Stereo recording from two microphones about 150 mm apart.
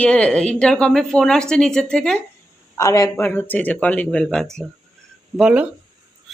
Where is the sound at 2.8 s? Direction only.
20° left (ahead or behind); by 5.7 s 5° right (ahead or behind).